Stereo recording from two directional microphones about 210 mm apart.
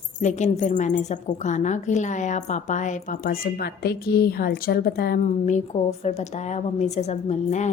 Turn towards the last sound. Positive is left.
turn(degrees=35)  # may be behind; listen again after turning